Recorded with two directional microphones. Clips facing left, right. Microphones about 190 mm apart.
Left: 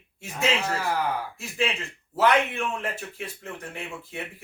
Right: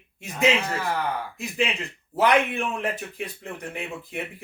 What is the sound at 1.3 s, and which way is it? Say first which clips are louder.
A man's voice: right 1 dB; 15° right (ahead or behind).